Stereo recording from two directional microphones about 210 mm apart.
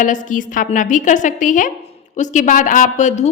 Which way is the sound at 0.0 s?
40° left (ahead or behind).